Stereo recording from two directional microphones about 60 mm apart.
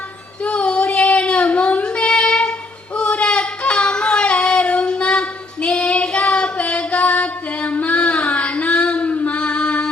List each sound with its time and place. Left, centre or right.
0.4 s female singing: centre